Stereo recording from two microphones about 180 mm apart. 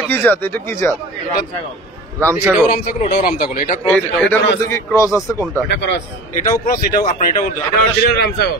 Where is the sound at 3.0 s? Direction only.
55° left (ahead or behind).